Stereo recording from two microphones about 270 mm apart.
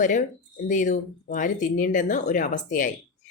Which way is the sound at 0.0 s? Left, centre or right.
Left.